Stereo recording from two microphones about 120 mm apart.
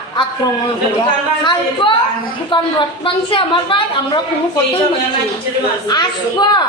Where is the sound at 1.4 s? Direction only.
45° left (ahead or behind).